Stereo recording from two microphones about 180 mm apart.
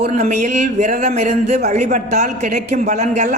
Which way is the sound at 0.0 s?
40° right (ahead or behind).